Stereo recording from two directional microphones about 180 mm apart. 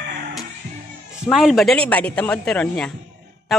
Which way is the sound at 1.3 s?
Centre (ahead or behind).